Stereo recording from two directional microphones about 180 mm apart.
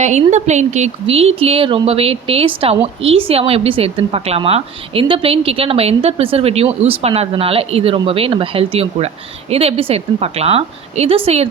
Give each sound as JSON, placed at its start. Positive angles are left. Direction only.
{"t": 0.0, "sound": "a woman's voice", "side_deg": -40}